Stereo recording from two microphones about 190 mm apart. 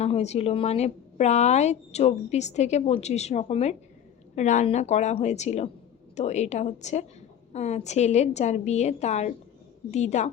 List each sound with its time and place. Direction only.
0.0 s speech: 35° left (ahead or behind)